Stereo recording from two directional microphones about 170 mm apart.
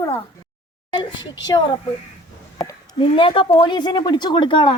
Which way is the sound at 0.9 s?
30° left (ahead or behind).